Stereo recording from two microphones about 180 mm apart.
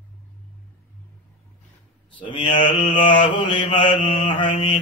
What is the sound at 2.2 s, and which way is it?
Mantra, 30° left (ahead or behind).